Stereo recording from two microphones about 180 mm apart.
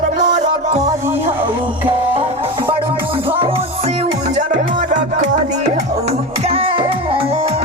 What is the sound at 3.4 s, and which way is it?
Music, 35° right (ahead or behind).